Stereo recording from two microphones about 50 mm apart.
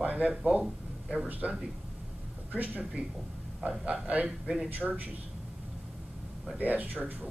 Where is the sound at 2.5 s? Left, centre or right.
Right.